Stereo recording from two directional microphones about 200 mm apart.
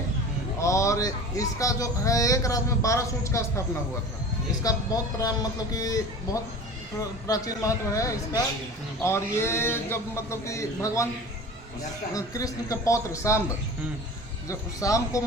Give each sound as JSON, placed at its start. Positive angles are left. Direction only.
{"t": 0.6, "sound": "a man's voice", "side_deg": 15}
{"t": 4.6, "sound": "a man's voice", "side_deg": 20}
{"t": 12.1, "sound": "a man's voice", "side_deg": 15}
{"t": 14.4, "sound": "a man's voice", "side_deg": 15}